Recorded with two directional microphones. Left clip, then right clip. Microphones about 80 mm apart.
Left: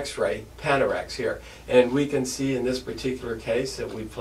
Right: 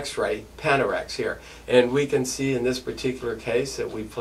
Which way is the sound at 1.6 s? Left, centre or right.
Right.